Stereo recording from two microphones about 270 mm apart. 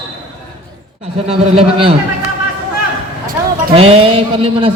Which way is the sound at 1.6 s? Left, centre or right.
Centre.